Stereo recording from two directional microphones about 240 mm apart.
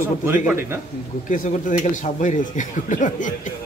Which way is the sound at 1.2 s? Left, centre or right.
Left.